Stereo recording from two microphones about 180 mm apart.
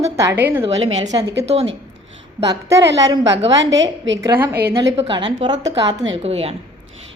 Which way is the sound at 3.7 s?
90° right.